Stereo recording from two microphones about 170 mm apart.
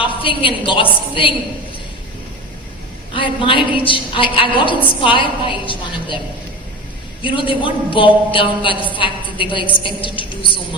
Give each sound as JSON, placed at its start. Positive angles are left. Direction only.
{"t": 0.0, "sound": "a woman's voice", "side_deg": 30}
{"t": 1.1, "sound": "music", "side_deg": 30}
{"t": 3.1, "sound": "a woman's voice", "side_deg": 30}
{"t": 7.2, "sound": "a woman's voice", "side_deg": 30}
{"t": 9.7, "sound": "music", "side_deg": 30}